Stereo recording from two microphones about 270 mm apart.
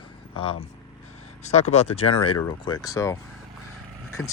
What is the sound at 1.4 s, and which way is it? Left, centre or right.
Speech, left.